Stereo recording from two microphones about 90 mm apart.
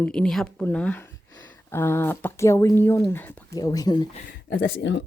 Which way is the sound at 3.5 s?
40° left (ahead or behind).